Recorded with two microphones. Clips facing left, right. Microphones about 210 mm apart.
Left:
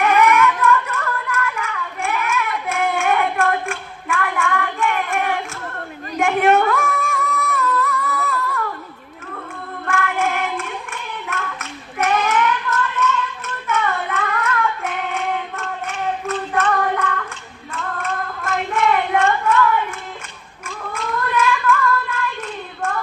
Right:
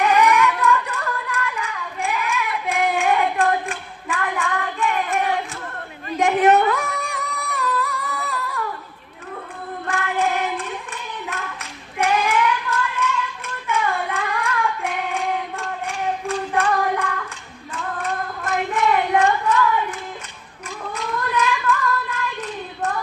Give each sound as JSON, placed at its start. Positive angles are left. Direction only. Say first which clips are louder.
{"t": 0.0, "sound": "a sound", "louder": "left 1 dB", "side_deg": -15}
{"t": 0.3, "sound": "child singing", "louder": "left 2 dB", "side_deg": -15}
{"t": 6.1, "sound": "female singing", "louder": "even", "side_deg": -20}
{"t": 9.8, "sound": "female singing", "louder": "left 1 dB", "side_deg": -20}
{"t": 11.9, "sound": "child singing", "louder": "left 1 dB", "side_deg": -10}
{"t": 13.7, "sound": "singing", "louder": "left 1 dB", "side_deg": -10}
{"t": 20.7, "sound": "cat", "louder": "left 1 dB", "side_deg": -20}